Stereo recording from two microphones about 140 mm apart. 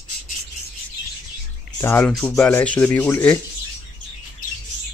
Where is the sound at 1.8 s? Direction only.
15° left (ahead or behind).